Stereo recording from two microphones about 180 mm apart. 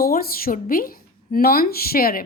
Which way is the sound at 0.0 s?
55° left (ahead or behind).